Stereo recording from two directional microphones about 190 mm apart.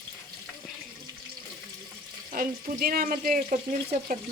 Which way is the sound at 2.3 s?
50° right (ahead or behind).